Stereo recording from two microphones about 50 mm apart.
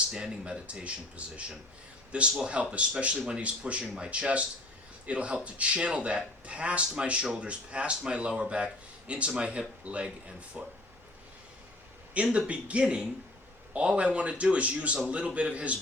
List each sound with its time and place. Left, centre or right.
0.1 s speech: centre
12.1 s a man's voice: right